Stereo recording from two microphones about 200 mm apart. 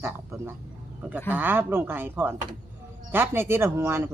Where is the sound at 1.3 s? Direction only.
10° right (ahead or behind).